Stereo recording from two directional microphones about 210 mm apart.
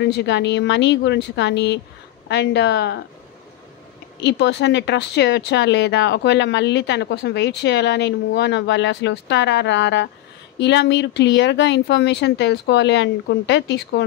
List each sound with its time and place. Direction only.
0.0 s a woman's voice: 55° left (ahead or behind)
4.2 s speech: 55° left (ahead or behind)